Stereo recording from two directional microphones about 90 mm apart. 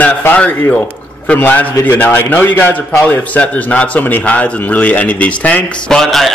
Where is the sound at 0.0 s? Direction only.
20° left (ahead or behind).